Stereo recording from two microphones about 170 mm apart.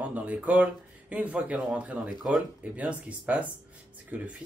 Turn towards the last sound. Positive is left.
turn(degrees=-10)  # may be behind; listen again after turning